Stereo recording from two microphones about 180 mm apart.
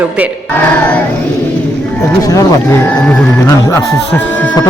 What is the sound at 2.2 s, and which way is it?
Speech, 15° left (ahead or behind).